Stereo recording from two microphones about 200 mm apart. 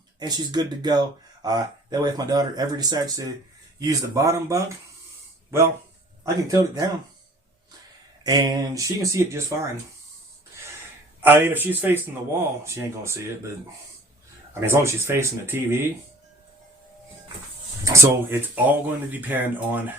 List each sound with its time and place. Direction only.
0.2 s speech: 20° right (ahead or behind)
8.2 s speech: 20° right (ahead or behind)
11.2 s speech: 10° right (ahead or behind)
14.5 s speech: 10° right (ahead or behind)
17.8 s speech: 10° right (ahead or behind)